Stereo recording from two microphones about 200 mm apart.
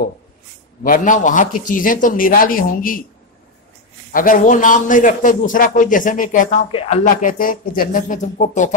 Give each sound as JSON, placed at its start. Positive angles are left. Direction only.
{"t": 0.8, "sound": "a man's voice", "side_deg": 45}
{"t": 4.1, "sound": "a man's voice", "side_deg": 45}
{"t": 6.7, "sound": "a man's voice", "side_deg": 30}